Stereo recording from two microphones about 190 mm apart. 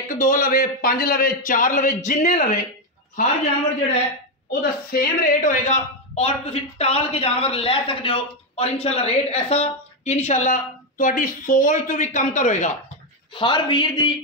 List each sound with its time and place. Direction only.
0.1 s a man's voice: 45° left (ahead or behind)
4.5 s a woman's voice: 50° left (ahead or behind)
13.3 s a man's voice: 25° left (ahead or behind)